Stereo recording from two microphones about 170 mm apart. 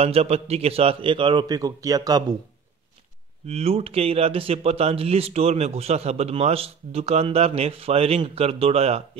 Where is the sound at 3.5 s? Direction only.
35° right (ahead or behind).